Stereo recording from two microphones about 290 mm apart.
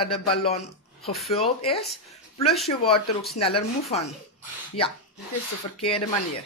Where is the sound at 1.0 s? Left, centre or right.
Centre.